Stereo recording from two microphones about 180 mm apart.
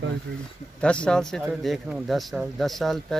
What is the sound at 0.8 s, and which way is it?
Speech, 5° left (ahead or behind).